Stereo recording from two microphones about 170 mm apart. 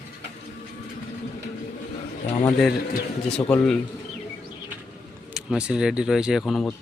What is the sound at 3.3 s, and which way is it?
Speech, 5° left (ahead or behind).